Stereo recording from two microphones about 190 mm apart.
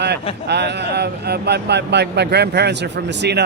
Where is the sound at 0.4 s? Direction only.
60° right (ahead or behind).